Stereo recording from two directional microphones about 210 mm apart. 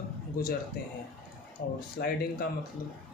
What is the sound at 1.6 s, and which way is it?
Speech, 45° left (ahead or behind).